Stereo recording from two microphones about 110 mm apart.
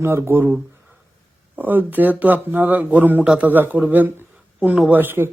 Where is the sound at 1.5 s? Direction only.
15° right (ahead or behind).